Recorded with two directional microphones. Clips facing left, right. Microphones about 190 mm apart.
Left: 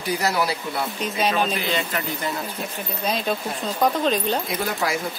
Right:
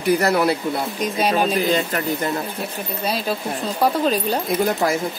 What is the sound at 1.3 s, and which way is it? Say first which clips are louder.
Speech: right 5 dB; 40° right (ahead or behind).